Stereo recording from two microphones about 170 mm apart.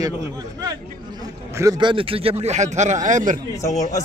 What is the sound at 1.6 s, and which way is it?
Speech, 30° right (ahead or behind).